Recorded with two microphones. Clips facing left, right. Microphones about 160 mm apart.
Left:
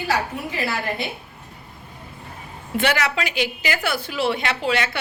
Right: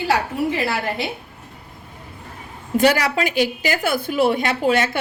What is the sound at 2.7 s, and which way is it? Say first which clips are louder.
A woman's voice: right 5 dB; 40° right (ahead or behind).